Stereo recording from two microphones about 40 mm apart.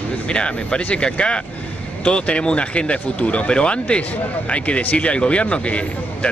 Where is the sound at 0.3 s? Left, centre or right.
Left.